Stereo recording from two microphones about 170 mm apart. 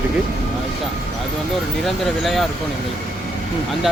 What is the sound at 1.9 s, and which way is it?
Speech, centre (ahead or behind).